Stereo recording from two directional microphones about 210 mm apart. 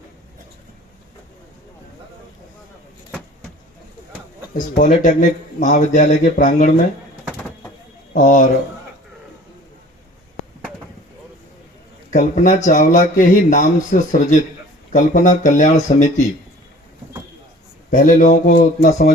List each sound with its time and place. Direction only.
4.8 s speech: 35° left (ahead or behind)
8.1 s speech: 40° left (ahead or behind)
12.1 s speech: 35° left (ahead or behind)
17.9 s speech: 40° left (ahead or behind)